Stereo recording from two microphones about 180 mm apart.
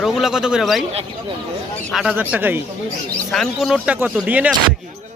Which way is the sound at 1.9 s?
5° right (ahead or behind).